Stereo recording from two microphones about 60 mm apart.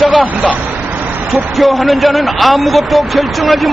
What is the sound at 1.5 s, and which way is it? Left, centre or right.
Speech, centre.